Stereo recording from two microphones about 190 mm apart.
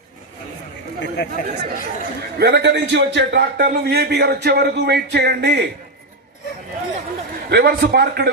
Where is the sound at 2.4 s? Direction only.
60° right (ahead or behind).